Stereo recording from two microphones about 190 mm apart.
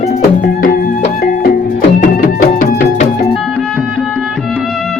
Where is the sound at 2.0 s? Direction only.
50° left (ahead or behind).